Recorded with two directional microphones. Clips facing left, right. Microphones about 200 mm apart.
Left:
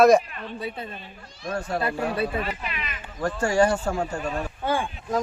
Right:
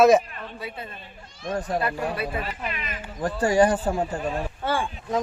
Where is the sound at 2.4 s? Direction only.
45° right (ahead or behind).